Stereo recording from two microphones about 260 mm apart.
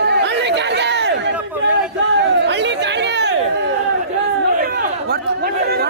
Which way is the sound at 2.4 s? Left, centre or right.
Right.